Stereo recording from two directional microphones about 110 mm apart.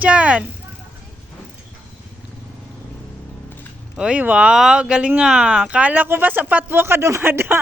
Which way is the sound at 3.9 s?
10° right (ahead or behind).